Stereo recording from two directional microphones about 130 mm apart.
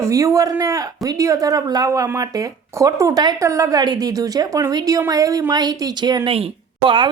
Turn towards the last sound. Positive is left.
turn(degrees=-40)  # may be behind; listen again after turning